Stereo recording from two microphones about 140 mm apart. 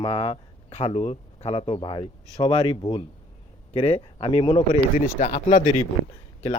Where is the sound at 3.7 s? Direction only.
50° left (ahead or behind).